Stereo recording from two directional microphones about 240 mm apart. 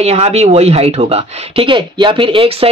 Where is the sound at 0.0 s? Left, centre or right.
Right.